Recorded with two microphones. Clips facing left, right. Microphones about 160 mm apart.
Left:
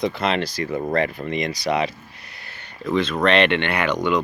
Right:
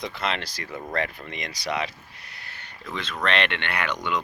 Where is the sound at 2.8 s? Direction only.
30° left (ahead or behind).